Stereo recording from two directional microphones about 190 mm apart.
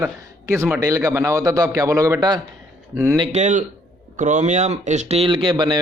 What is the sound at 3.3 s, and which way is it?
A man's voice, 40° right (ahead or behind).